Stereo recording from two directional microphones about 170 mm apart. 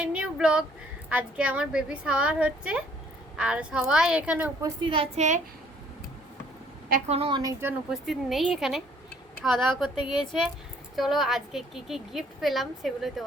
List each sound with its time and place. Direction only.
0.0 s a sound: 5° right (ahead or behind)
1.1 s a woman's voice: 5° right (ahead or behind)
4.6 s a woman's voice: 30° right (ahead or behind)
7.1 s a woman's voice: 30° right (ahead or behind)
7.6 s a woman's voice: 5° right (ahead or behind)
9.9 s speech: 30° left (ahead or behind)
10.9 s a woman's voice: centre (ahead or behind)